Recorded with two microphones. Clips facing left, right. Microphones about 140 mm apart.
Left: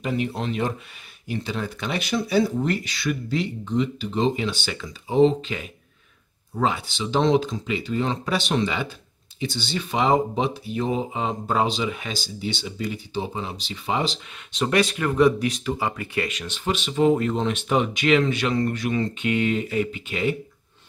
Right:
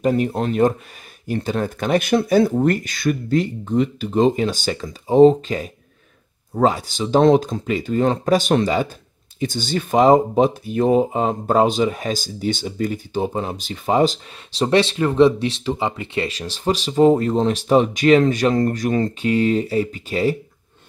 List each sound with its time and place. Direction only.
0.0 s speech: 45° right (ahead or behind)